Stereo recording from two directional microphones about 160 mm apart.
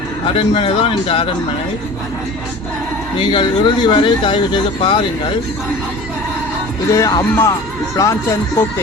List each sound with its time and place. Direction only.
0.3 s speech: 35° left (ahead or behind)
3.2 s speech: 30° left (ahead or behind)
6.9 s speech: 20° left (ahead or behind)